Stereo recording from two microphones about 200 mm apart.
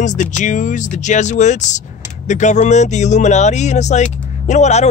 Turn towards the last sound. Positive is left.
turn(degrees=35)  # may be behind; listen again after turning